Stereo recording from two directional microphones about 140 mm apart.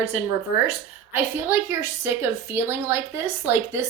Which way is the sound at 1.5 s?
20° right (ahead or behind).